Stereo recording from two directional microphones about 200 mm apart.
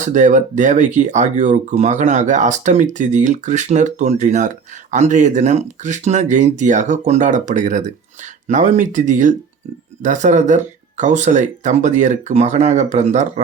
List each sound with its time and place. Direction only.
0.0 s speech: 40° right (ahead or behind)